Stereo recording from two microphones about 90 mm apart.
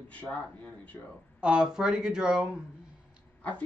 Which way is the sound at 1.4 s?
10° right (ahead or behind).